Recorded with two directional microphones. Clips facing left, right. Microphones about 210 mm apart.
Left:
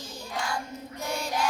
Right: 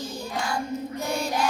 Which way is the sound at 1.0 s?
30° right (ahead or behind).